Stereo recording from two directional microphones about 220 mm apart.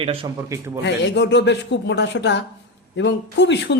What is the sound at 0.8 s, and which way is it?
Speech, 50° left (ahead or behind).